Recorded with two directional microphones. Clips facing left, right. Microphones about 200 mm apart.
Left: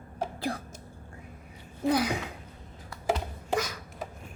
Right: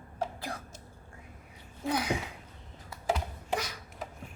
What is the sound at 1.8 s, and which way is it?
Speech, 35° left (ahead or behind).